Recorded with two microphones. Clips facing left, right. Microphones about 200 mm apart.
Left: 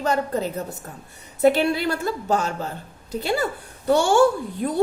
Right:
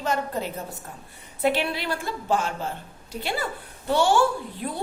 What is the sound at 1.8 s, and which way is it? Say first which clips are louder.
Speech: left 5 dB; 45° left (ahead or behind).